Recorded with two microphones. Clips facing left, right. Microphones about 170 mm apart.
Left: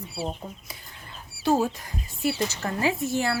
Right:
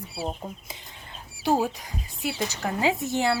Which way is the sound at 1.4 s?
15° right (ahead or behind).